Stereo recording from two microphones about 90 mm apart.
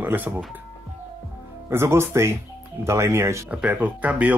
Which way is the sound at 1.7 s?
30° right (ahead or behind).